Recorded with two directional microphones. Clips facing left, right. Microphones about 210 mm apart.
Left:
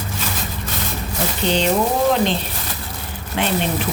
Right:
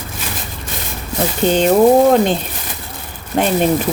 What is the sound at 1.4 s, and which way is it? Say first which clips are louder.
Speech: right 6 dB; 45° right (ahead or behind).